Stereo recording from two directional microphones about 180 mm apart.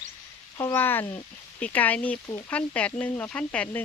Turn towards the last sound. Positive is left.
turn(degrees=5)  # may be behind; listen again after turning